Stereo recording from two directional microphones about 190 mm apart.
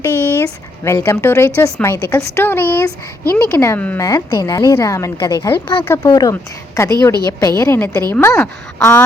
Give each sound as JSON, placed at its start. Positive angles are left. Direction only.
{"t": 0.0, "sound": "a woman's voice", "side_deg": 15}